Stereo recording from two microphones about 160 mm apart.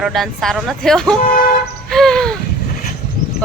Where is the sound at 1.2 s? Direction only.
60° left (ahead or behind).